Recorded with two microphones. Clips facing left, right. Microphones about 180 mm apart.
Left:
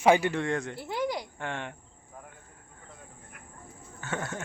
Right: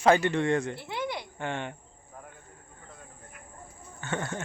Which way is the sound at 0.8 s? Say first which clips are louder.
Left 3 dB; 40° left (ahead or behind).